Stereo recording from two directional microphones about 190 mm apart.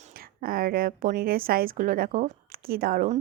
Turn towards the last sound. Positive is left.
turn(degrees=-45)  # may be behind; listen again after turning